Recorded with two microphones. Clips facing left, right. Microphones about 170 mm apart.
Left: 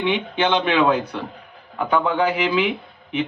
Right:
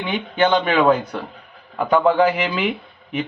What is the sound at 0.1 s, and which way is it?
Speech, 45° right (ahead or behind).